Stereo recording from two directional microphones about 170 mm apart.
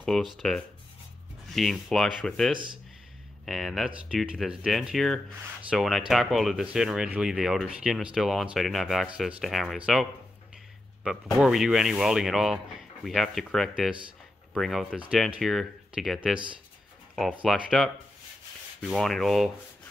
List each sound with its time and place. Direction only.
0.0 s speech: centre (ahead or behind)
2.5 s speech: 30° right (ahead or behind)
3.4 s speech: centre (ahead or behind)
11.3 s speech: 5° right (ahead or behind)